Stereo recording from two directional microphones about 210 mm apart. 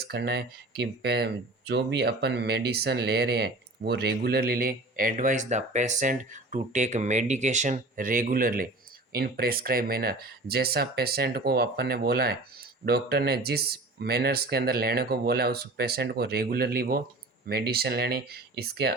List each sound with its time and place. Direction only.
0.0 s speech: 50° right (ahead or behind)